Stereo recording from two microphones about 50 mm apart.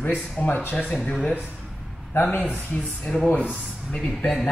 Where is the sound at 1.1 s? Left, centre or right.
Left.